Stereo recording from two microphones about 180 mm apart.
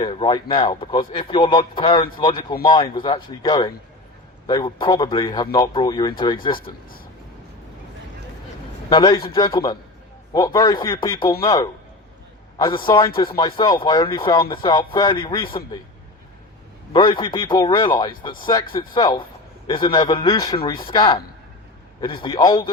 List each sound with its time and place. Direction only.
0.0 s speech: 25° left (ahead or behind)
8.9 s speech: 25° left (ahead or behind)
16.9 s speech: 25° left (ahead or behind)